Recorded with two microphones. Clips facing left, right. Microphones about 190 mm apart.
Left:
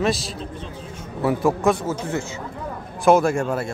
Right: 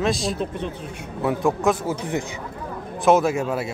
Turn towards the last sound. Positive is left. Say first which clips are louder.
# left 1 dB
turn(degrees=-5)  # may be behind; listen again after turning